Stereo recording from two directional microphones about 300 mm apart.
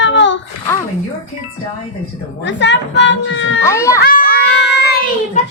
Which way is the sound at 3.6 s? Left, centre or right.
Centre.